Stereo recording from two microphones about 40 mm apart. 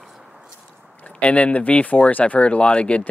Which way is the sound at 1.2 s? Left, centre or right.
Left.